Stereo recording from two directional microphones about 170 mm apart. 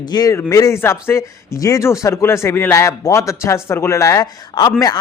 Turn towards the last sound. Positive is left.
turn(degrees=20)  # may be behind; listen again after turning